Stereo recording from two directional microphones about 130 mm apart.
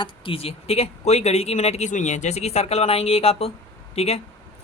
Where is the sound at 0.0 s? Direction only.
45° left (ahead or behind).